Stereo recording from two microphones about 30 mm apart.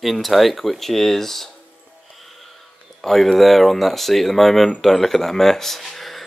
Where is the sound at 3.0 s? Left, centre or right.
Centre.